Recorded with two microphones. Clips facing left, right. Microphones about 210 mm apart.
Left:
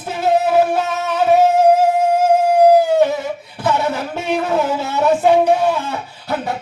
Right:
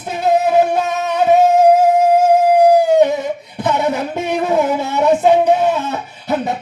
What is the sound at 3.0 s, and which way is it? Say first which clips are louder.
Singing: right 2 dB; 20° right (ahead or behind).